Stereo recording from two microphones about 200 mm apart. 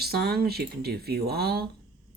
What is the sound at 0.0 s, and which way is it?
Speech, 50° right (ahead or behind).